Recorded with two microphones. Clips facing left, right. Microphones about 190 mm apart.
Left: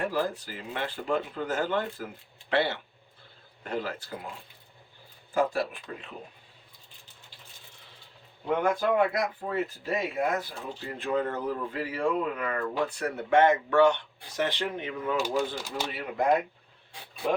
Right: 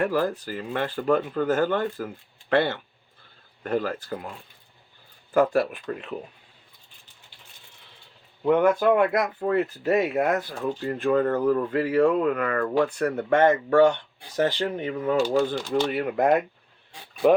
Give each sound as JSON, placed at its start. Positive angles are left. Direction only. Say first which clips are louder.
{"t": 0.0, "sound": "speech", "louder": "right 5 dB", "side_deg": -60}
{"t": 5.3, "sound": "speech", "louder": "right 6 dB", "side_deg": -65}
{"t": 8.4, "sound": "speech", "louder": "right 7 dB", "side_deg": -65}
{"t": 15.9, "sound": "speech", "louder": "right 2 dB", "side_deg": -60}